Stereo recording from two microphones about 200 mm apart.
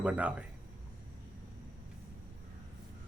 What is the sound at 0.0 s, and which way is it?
Speech, 5° right (ahead or behind).